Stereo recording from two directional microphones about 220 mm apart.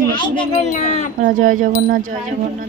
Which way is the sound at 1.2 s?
35° right (ahead or behind).